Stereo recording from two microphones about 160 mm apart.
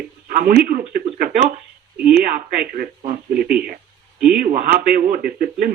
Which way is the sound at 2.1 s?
65° right (ahead or behind).